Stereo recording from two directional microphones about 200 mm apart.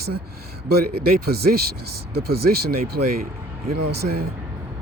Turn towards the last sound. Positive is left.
turn(degrees=-50)  # may be behind; listen again after turning